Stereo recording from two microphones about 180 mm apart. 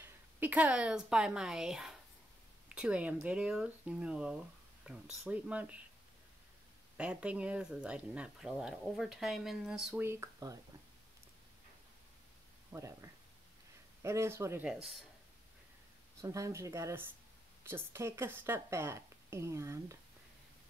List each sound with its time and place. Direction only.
0.0 s a woman's voice: 10° right (ahead or behind)
7.0 s speech: 5° right (ahead or behind)
10.0 s a woman's voice: 15° right (ahead or behind)
12.7 s a woman's voice: 15° right (ahead or behind)
14.7 s speech: centre (ahead or behind)
16.2 s a woman's voice: 15° right (ahead or behind)